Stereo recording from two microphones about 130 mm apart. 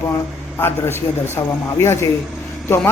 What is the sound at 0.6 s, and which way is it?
A man's voice, 20° left (ahead or behind).